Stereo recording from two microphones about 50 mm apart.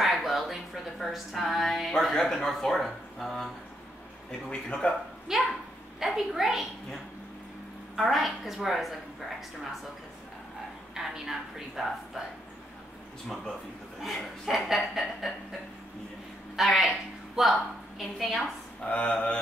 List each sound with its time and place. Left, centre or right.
0.0 s speech: centre
4.5 s speech: centre
5.3 s a woman's voice: centre
7.9 s chuckle: centre
11.0 s chuckle: centre
14.0 s chuckle: centre
16.5 s chuckle: centre
17.4 s a woman's voice: centre
18.9 s speech: left